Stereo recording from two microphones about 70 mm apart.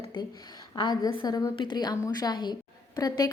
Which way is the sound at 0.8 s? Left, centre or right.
Left.